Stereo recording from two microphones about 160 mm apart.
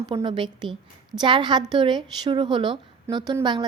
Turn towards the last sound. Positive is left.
turn(degrees=-30)  # may be behind; listen again after turning